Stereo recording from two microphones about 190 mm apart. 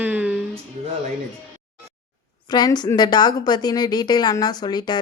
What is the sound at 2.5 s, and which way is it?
A woman's voice, 20° left (ahead or behind).